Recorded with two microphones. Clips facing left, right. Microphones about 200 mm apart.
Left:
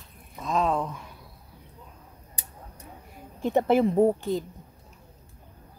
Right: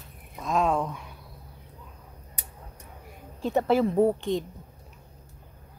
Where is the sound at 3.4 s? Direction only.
20° left (ahead or behind).